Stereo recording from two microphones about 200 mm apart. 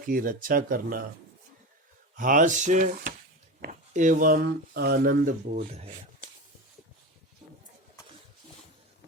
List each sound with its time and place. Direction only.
0.1 s speech: 45° right (ahead or behind)
2.1 s speech: 40° right (ahead or behind)
5.7 s speech: 30° right (ahead or behind)